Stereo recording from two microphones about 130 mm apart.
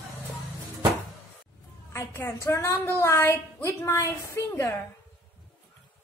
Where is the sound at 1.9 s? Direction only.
20° left (ahead or behind).